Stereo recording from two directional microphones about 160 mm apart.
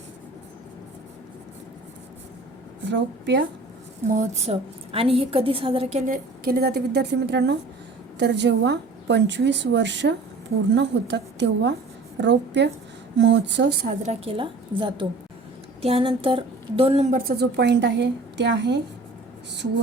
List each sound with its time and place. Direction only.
2.9 s a woman's voice: 90° right
4.1 s a woman's voice: 50° right (ahead or behind)
6.4 s a woman's voice: 70° right (ahead or behind); by 13.9 s 90° right
14.0 s a woman's voice: 40° right (ahead or behind); by 18.8 s 90° right